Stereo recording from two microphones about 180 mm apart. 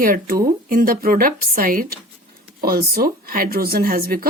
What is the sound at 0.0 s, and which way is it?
Speech, 55° right (ahead or behind).